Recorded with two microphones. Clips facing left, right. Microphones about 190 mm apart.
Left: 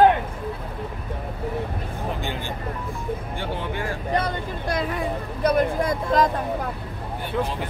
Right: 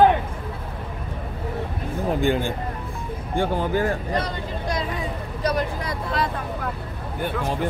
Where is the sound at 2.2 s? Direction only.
50° right (ahead or behind).